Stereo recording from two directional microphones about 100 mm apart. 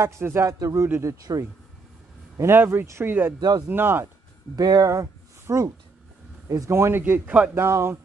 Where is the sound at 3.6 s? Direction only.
20° right (ahead or behind).